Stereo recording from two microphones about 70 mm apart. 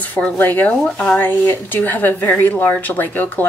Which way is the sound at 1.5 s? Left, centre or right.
Left.